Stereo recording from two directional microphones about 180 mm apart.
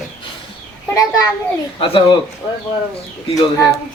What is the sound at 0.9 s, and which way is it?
A child's voice, 20° left (ahead or behind).